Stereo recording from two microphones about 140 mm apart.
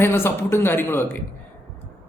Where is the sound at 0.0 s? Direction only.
15° left (ahead or behind).